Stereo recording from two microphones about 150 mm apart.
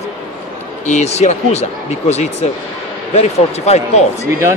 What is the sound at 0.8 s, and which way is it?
Speech, 50° left (ahead or behind).